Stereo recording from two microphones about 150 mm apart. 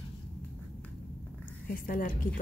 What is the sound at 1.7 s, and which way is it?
Speech, 65° left (ahead or behind).